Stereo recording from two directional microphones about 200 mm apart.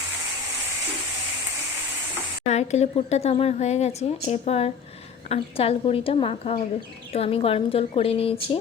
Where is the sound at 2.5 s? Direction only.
35° left (ahead or behind).